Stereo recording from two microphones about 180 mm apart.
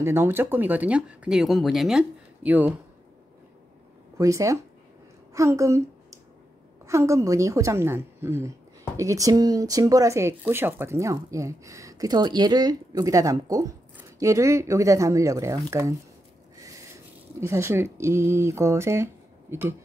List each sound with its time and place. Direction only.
0.0 s a woman's voice: 15° right (ahead or behind)
4.2 s a woman's voice: 15° right (ahead or behind)